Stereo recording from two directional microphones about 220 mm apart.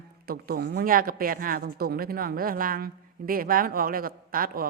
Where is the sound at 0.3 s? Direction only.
45° right (ahead or behind).